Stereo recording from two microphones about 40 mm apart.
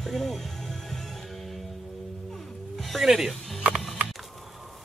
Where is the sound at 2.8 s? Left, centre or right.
Centre.